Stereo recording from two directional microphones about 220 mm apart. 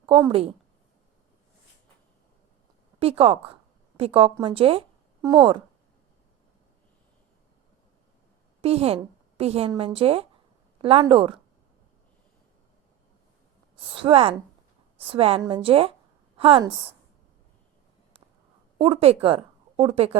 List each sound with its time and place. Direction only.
0.2 s a woman's voice: 25° right (ahead or behind)
3.0 s a woman's voice: 25° right (ahead or behind)
8.6 s a woman's voice: 25° right (ahead or behind)
13.9 s a woman's voice: 25° right (ahead or behind)
18.8 s a woman's voice: 25° right (ahead or behind)